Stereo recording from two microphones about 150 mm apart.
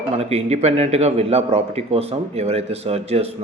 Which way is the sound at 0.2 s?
45° right (ahead or behind).